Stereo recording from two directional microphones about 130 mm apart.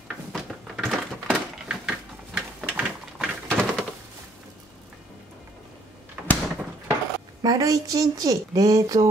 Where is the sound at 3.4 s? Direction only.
5° left (ahead or behind).